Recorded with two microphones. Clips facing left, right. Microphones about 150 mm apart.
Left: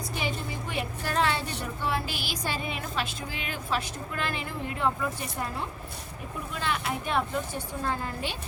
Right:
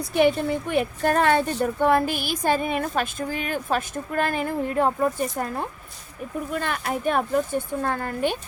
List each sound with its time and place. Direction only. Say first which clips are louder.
0.1 s a woman's voice: right 15 dB; 55° right (ahead or behind)